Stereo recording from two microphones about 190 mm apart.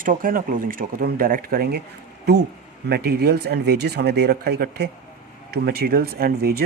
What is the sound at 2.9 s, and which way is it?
Speech, 55° right (ahead or behind).